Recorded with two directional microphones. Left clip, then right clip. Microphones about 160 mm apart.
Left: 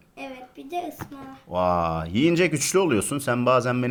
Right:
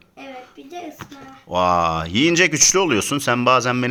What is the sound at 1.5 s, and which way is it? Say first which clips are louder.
Speech: right 5 dB; 20° right (ahead or behind).